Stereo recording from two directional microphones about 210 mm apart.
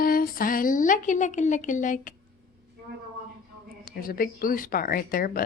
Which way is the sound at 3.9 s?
45° left (ahead or behind).